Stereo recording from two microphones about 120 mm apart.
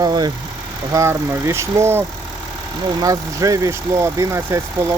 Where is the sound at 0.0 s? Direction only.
35° right (ahead or behind).